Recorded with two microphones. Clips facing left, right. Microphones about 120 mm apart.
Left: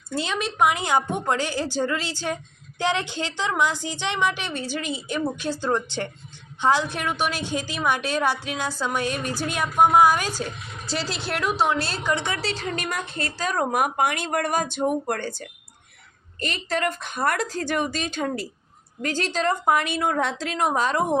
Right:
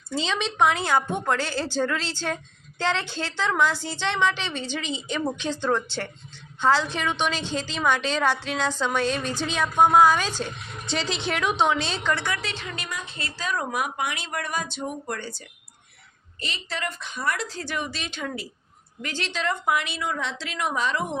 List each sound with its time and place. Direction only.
0.2 s a woman's voice: 10° left (ahead or behind)
12.1 s a woman's voice: 20° left (ahead or behind)
12.4 s a woman's voice: 35° left (ahead or behind)
12.6 s speech: 50° left (ahead or behind)
13.1 s speech: 45° left (ahead or behind)